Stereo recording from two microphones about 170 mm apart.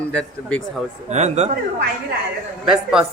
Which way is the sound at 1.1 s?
40° right (ahead or behind).